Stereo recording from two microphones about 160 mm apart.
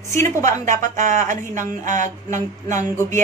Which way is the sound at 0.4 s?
50° right (ahead or behind).